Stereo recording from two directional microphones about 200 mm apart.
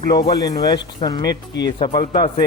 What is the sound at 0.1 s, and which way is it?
Speech, 20° left (ahead or behind).